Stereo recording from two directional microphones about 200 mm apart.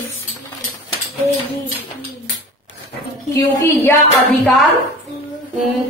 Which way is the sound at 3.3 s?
15° left (ahead or behind).